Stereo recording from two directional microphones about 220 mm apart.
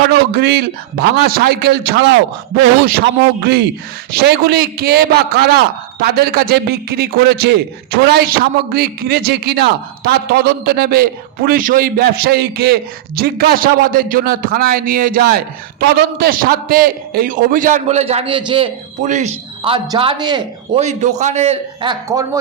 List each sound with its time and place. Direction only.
0.1 s a man's voice: 45° right (ahead or behind); by 20.8 s 20° right (ahead or behind)
20.8 s a man's voice: 30° right (ahead or behind)